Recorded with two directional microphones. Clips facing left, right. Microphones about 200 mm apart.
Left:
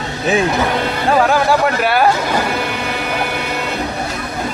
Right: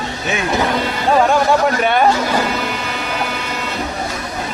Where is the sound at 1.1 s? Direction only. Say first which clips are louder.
Even; centre (ahead or behind).